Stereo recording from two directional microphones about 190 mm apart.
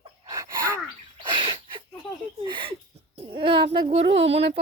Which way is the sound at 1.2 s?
25° right (ahead or behind).